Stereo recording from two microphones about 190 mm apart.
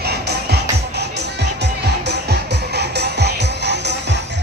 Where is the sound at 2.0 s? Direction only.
60° right (ahead or behind).